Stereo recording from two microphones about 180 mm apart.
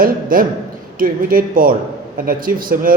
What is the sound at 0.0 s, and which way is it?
A man's voice, 50° right (ahead or behind).